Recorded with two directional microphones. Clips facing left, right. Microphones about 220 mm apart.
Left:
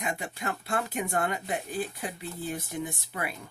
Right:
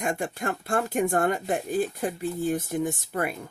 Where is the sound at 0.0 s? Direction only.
50° right (ahead or behind).